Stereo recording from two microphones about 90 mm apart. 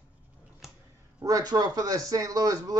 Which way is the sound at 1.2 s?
45° right (ahead or behind).